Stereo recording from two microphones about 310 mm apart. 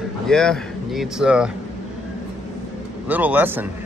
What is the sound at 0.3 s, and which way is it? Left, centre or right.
Speech, centre.